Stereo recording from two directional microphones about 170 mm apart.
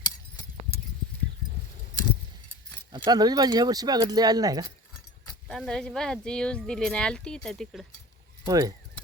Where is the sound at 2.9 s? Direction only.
25° right (ahead or behind).